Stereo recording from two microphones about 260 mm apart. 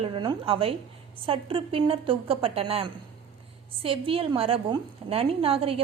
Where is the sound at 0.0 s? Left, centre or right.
Centre.